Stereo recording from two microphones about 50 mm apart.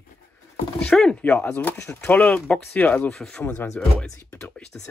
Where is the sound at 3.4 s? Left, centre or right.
Left.